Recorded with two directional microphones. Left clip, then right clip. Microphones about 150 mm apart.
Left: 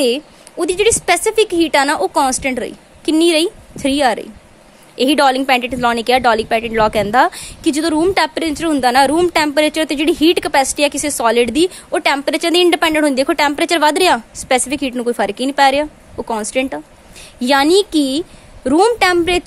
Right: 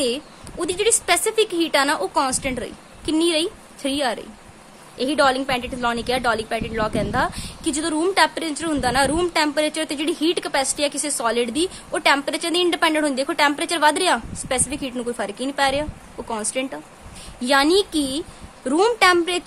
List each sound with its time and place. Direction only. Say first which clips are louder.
0.0 s a woman's voice: left 8 dB; 40° left (ahead or behind)